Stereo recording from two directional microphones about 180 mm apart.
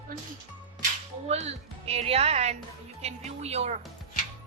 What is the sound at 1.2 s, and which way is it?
A woman's voice, 35° right (ahead or behind).